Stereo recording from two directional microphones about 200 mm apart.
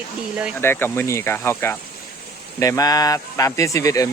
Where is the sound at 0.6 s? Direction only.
10° left (ahead or behind).